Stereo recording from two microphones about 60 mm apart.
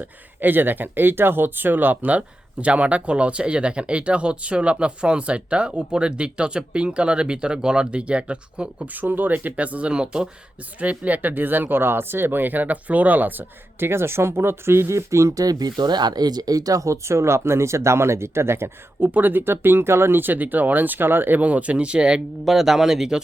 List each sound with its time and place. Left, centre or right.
0.0 s speech: right
8.9 s speech: right
15.4 s speech: right; by 22.2 s centre
22.4 s a man's voice: centre